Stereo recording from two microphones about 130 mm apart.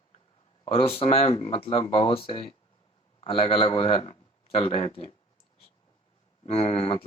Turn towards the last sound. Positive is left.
turn(degrees=50)  # may be behind; listen again after turning